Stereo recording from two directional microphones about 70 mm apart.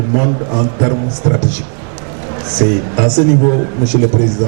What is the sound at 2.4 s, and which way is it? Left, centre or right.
Speech, centre.